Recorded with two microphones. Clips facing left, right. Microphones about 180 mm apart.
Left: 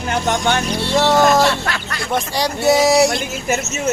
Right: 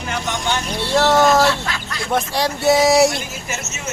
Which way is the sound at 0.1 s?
55° left (ahead or behind).